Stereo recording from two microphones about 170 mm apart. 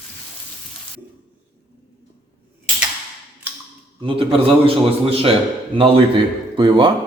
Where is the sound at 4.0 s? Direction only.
30° right (ahead or behind).